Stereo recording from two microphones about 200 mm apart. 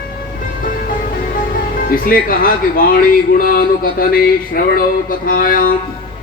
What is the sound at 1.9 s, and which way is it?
Speech, 45° left (ahead or behind).